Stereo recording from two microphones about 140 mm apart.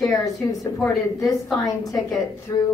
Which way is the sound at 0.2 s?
25° left (ahead or behind).